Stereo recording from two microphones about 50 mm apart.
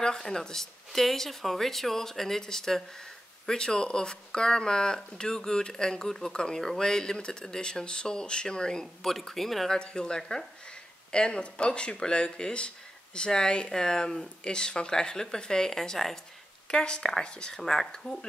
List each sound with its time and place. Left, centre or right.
0.0 s speech: centre
9.1 s speech: centre
9.8 s speech: centre